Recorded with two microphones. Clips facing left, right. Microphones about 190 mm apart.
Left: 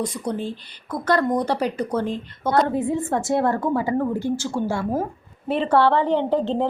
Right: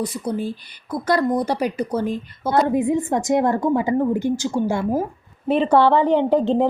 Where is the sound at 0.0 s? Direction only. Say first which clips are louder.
Right 2 dB; 10° right (ahead or behind).